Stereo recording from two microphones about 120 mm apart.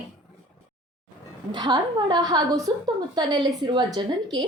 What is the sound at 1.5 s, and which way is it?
A woman's voice, 40° right (ahead or behind).